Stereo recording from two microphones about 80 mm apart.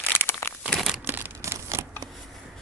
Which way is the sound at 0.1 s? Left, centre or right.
Left.